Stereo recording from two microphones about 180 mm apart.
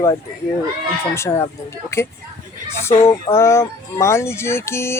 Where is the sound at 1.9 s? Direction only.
15° left (ahead or behind).